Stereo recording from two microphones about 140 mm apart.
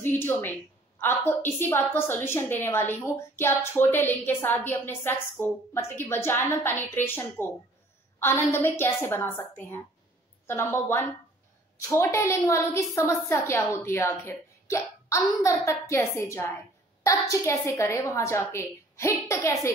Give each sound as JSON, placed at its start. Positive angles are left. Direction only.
{"t": 0.0, "sound": "a woman's voice", "side_deg": 15}